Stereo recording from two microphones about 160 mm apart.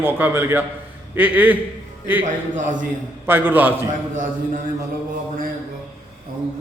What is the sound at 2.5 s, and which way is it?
Speech, 50° right (ahead or behind).